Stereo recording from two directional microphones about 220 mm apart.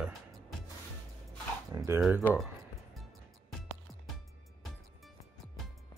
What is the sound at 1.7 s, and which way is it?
Speech, 10° right (ahead or behind).